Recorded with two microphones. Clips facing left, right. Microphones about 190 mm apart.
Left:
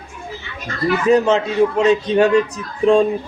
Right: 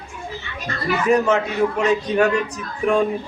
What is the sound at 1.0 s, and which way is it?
A man's voice, 25° left (ahead or behind).